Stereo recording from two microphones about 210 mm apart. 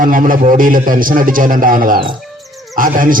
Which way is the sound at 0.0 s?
40° right (ahead or behind).